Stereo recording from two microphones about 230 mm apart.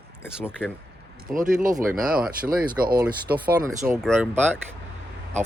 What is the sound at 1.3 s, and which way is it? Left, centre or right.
Speech, right.